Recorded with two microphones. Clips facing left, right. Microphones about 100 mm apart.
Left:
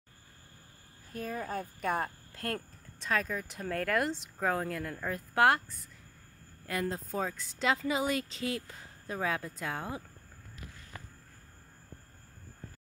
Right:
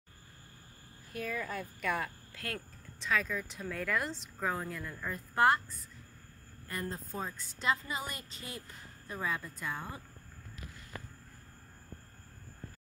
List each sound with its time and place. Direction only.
1.1 s speech: 35° left (ahead or behind); by 5.9 s 65° left (ahead or behind)
6.7 s a woman's voice: 85° left